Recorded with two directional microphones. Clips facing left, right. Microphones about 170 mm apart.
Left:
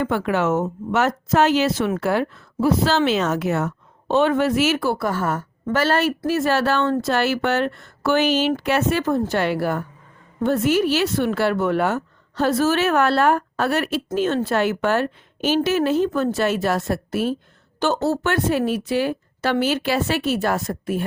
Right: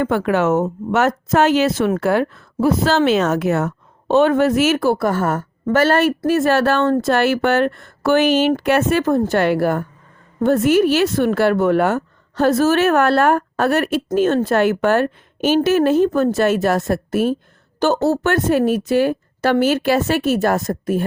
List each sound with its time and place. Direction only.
0.0 s speech: 50° right (ahead or behind)